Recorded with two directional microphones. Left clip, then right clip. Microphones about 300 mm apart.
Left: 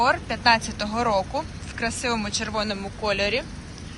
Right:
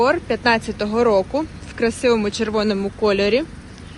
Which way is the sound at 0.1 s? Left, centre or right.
Centre.